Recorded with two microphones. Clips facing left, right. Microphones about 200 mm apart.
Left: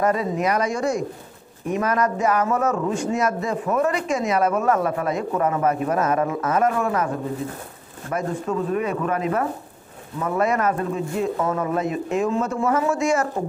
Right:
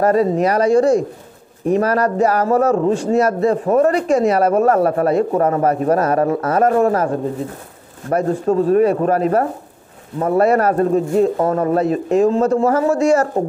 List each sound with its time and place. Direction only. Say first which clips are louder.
0.0 s a man's voice: right 7 dB; 35° right (ahead or behind)